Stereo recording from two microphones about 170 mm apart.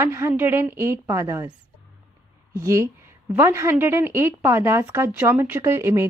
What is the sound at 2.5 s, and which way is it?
A woman's voice, 20° right (ahead or behind).